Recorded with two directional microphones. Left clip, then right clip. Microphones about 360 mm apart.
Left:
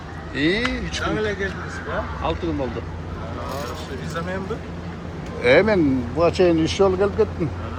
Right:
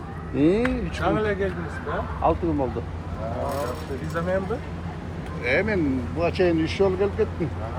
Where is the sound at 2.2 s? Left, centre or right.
Centre.